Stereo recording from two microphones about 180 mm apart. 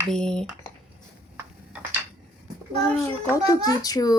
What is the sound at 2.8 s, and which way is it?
A child's voice, 15° left (ahead or behind).